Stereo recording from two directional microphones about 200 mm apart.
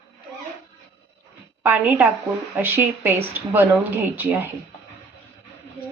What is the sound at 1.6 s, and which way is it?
Speech, 10° right (ahead or behind).